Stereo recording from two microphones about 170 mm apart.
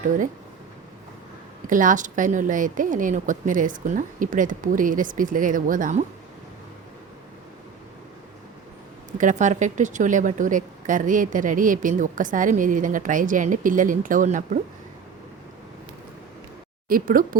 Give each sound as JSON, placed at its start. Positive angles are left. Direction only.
{"t": 1.6, "sound": "speech", "side_deg": -50}
{"t": 9.1, "sound": "speech", "side_deg": -45}
{"t": 16.9, "sound": "speech", "side_deg": -55}